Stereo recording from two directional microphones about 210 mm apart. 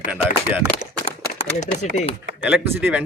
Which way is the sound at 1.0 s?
30° left (ahead or behind).